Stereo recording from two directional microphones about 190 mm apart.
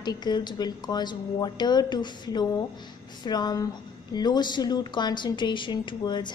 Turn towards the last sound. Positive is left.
turn(degrees=25)  # may be behind; listen again after turning